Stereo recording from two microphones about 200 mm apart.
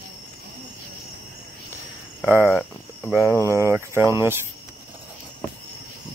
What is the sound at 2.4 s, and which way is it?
Cricket, 5° left (ahead or behind).